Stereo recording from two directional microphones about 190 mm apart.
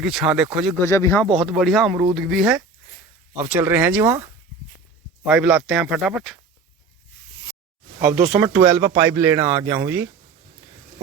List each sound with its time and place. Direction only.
0.0 s speech: 5° right (ahead or behind)
0.8 s speech: 15° left (ahead or behind)
1.4 s speech: centre (ahead or behind)
8.0 s speech: 5° right (ahead or behind)